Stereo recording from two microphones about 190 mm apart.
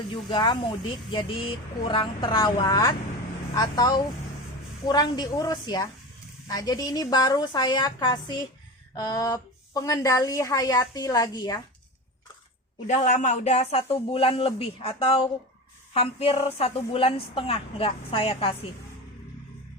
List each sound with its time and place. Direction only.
0.1 s speech: 25° left (ahead or behind)
12.9 s speech: 40° left (ahead or behind)